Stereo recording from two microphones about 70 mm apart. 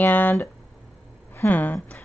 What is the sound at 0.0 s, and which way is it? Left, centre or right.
A woman's voice, left.